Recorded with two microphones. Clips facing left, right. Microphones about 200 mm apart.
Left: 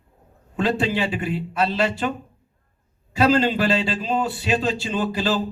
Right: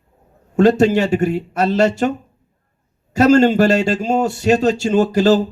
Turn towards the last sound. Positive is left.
turn(degrees=-45)  # may be behind; listen again after turning